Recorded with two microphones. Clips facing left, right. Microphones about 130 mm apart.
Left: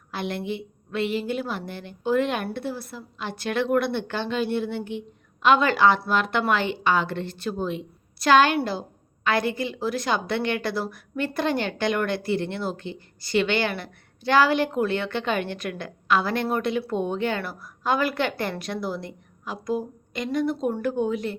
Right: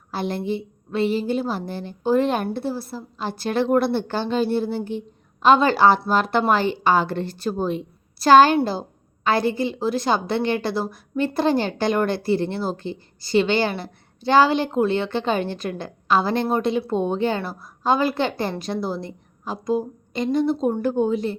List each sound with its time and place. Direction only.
0.1 s a woman's voice: 35° right (ahead or behind)